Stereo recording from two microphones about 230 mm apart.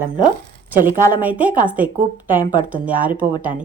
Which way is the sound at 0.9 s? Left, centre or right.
Right.